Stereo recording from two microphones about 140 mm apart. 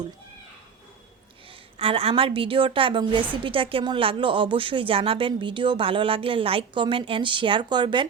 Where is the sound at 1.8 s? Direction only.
40° right (ahead or behind).